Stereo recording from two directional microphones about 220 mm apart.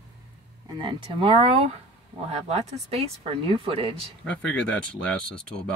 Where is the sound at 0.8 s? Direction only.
20° right (ahead or behind).